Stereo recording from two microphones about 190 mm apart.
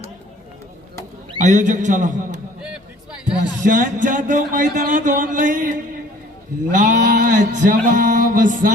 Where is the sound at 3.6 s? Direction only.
45° right (ahead or behind).